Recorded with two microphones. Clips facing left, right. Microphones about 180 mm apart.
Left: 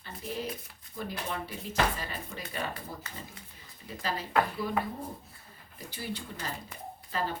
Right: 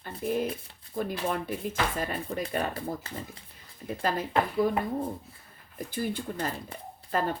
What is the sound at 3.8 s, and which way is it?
Speech, 50° right (ahead or behind).